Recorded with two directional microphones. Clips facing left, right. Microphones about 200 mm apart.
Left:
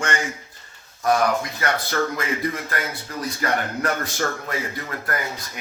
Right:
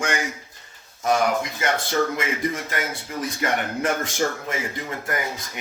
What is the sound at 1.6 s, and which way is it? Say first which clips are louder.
Speech: right 2 dB; 20° right (ahead or behind).